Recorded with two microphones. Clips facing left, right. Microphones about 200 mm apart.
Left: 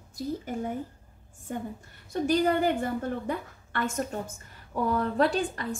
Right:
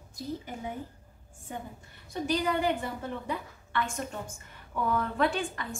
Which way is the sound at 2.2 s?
45° left (ahead or behind).